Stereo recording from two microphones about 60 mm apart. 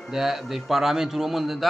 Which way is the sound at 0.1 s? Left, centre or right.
Centre.